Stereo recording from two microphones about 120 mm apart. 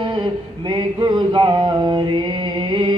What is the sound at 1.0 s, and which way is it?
Mantra, 40° right (ahead or behind).